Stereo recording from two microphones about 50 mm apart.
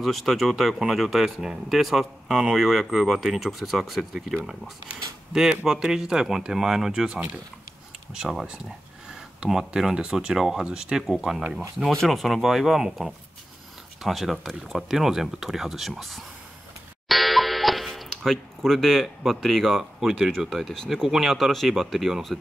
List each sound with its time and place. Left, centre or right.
0.0 s speech: centre
5.3 s speech: centre
9.4 s speech: centre
17.1 s a sound: centre
19.8 s speech: centre